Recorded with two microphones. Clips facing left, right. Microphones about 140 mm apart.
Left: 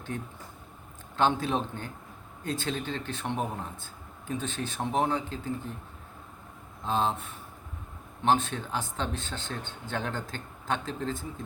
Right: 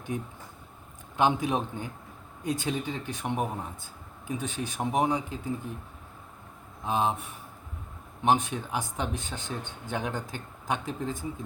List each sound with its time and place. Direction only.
0.1 s speech: 15° right (ahead or behind)
6.8 s speech: 15° right (ahead or behind)